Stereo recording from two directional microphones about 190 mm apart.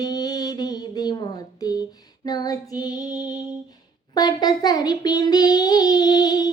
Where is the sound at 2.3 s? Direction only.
20° left (ahead or behind).